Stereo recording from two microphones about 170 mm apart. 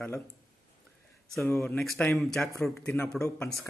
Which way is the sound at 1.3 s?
5° left (ahead or behind).